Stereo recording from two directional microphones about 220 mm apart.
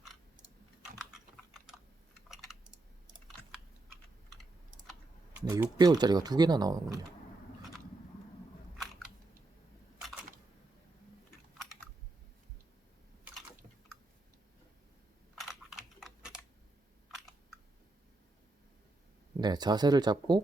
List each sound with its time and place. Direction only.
2.3 s computer keyboard: centre (ahead or behind)
4.9 s typing: 5° right (ahead or behind)
5.5 s speech: 10° right (ahead or behind)
15.4 s typing: centre (ahead or behind)
19.4 s speech: 20° right (ahead or behind)